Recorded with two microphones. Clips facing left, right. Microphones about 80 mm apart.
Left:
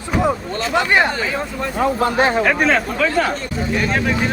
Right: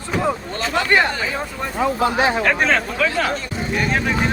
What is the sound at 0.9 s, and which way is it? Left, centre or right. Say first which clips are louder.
Speech: even; left.